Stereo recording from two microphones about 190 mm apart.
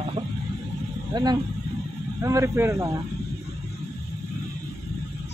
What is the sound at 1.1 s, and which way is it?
Speech, 20° right (ahead or behind).